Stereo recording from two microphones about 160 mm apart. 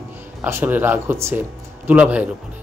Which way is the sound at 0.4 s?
15° right (ahead or behind).